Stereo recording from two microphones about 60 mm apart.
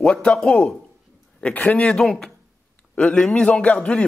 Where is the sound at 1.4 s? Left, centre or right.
Left.